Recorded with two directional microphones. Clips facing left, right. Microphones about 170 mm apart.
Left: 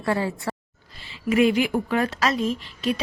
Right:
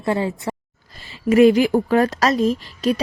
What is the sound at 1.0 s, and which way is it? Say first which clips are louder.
A woman's voice: right 7 dB; 40° right (ahead or behind).